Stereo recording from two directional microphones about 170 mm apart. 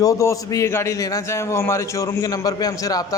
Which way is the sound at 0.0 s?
20° left (ahead or behind).